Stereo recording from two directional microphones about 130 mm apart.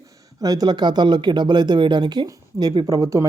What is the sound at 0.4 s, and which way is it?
Speech, 30° right (ahead or behind).